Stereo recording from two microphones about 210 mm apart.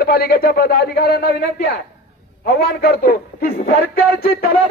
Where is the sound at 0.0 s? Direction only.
45° left (ahead or behind).